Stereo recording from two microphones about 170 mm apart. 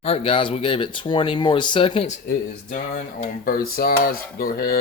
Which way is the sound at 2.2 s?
50° left (ahead or behind).